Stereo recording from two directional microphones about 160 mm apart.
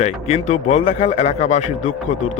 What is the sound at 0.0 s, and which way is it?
A man's voice, 40° left (ahead or behind).